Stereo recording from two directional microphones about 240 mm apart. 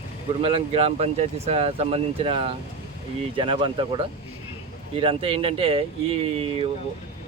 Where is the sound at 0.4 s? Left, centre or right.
Right.